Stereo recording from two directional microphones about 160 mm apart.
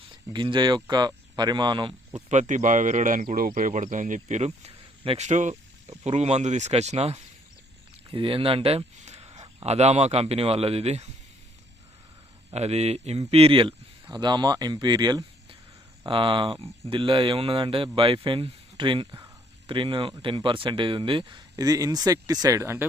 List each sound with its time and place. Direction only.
0.3 s speech: 30° right (ahead or behind)
2.1 s speech: 50° right (ahead or behind)
12.5 s speech: 40° right (ahead or behind); by 22.9 s 15° right (ahead or behind)